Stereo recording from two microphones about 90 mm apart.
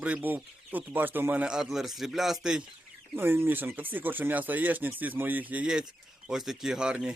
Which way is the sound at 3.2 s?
25° right (ahead or behind).